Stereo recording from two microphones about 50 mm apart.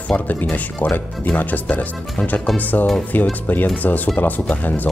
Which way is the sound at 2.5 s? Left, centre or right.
Left.